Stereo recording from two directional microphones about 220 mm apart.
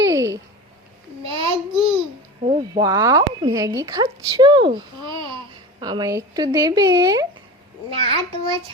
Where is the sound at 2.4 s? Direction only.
20° right (ahead or behind).